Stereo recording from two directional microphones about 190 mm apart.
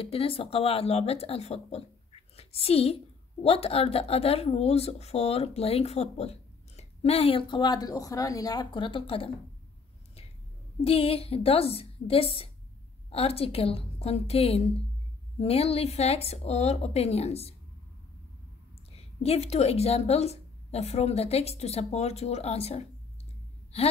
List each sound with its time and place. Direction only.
0.0 s a woman's voice: 30° left (ahead or behind)
10.8 s a woman's voice: 30° left (ahead or behind)
18.9 s a woman's voice: 30° left (ahead or behind)